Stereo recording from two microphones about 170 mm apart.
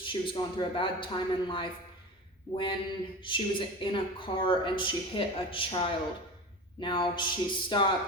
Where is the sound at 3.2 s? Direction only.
30° left (ahead or behind).